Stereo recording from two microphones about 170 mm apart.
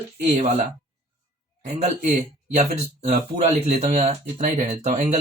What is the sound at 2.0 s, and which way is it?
Speech, 45° right (ahead or behind).